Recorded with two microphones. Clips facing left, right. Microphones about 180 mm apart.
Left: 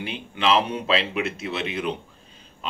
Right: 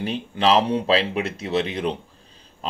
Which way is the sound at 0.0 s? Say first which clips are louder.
Right 4 dB; 40° right (ahead or behind).